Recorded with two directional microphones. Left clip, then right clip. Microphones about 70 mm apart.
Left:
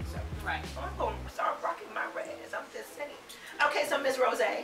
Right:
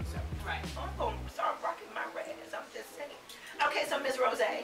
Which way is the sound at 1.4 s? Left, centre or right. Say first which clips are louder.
Left 2 dB; centre.